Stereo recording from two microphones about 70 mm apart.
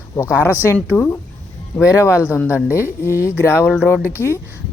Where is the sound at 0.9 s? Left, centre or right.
Left.